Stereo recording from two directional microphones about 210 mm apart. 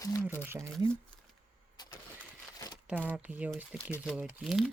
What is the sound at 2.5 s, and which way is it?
Crumpling, 15° left (ahead or behind).